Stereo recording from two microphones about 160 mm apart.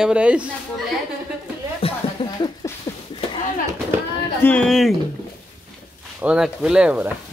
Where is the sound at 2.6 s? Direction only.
25° left (ahead or behind).